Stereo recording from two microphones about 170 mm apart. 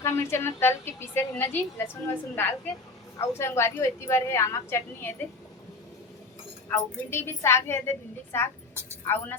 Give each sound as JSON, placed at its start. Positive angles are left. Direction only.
{"t": 0.0, "sound": "a woman's voice", "side_deg": 15}
{"t": 6.7, "sound": "a woman's voice", "side_deg": 15}